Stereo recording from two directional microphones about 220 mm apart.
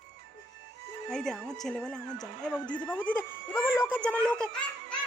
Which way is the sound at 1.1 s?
5° left (ahead or behind).